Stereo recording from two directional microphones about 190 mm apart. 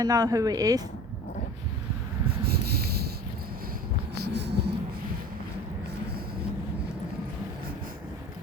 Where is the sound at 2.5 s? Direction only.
55° right (ahead or behind).